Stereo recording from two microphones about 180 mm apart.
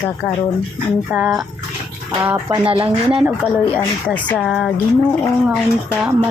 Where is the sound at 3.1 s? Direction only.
5° right (ahead or behind).